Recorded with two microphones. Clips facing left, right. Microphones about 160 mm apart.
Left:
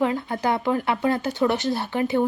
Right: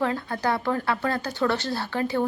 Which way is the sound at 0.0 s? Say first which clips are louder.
Left 3 dB; 20° left (ahead or behind).